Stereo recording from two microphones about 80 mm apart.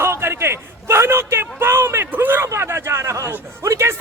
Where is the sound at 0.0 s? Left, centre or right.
Right.